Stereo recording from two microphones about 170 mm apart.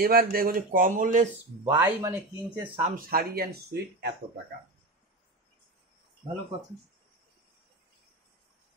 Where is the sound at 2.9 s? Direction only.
60° right (ahead or behind).